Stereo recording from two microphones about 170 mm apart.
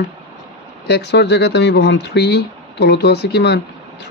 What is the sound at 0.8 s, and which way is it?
Speech, 85° left.